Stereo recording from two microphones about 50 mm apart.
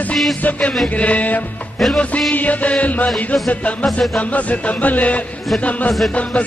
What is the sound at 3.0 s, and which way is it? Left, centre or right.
Music, centre.